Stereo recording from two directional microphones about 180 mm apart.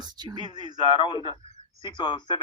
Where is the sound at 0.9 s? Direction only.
25° left (ahead or behind).